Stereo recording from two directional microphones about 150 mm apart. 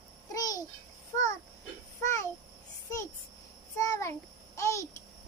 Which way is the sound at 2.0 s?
20° left (ahead or behind).